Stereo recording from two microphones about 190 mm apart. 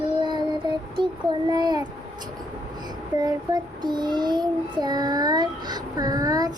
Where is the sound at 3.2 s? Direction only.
20° right (ahead or behind).